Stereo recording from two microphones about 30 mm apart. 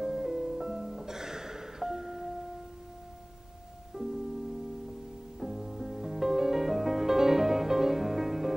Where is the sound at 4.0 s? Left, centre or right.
Right.